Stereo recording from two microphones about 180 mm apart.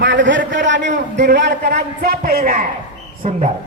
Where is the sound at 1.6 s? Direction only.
60° right (ahead or behind).